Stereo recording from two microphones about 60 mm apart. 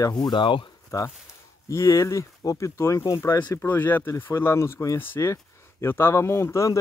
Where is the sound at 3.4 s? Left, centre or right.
Left.